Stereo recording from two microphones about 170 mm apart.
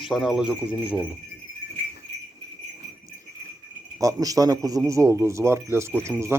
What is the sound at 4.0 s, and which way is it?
A man's voice, 20° right (ahead or behind).